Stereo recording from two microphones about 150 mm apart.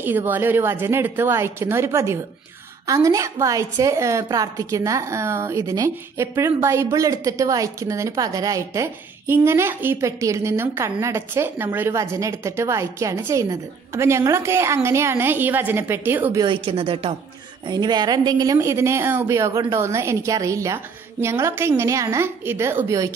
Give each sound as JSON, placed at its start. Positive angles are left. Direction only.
{"t": 0.0, "sound": "a woman's voice", "side_deg": -15}
{"t": 16.3, "sound": "a woman's voice", "side_deg": -35}